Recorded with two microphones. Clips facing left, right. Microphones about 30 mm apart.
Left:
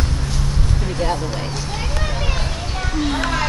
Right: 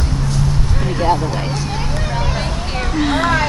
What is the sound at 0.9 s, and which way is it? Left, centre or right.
Speech, centre.